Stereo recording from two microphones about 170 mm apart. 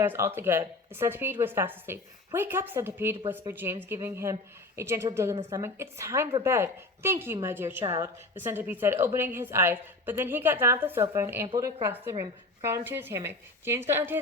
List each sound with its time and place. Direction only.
0.0 s a woman's voice: 15° right (ahead or behind)